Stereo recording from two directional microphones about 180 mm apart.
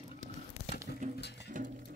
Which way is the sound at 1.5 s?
45° right (ahead or behind).